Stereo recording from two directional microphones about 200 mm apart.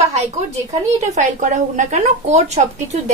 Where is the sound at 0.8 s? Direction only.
35° right (ahead or behind).